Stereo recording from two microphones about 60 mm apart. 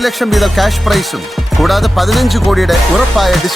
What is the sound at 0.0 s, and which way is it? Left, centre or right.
Music, centre.